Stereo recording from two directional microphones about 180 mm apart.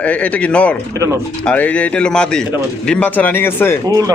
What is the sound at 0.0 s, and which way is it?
Speech, 10° left (ahead or behind).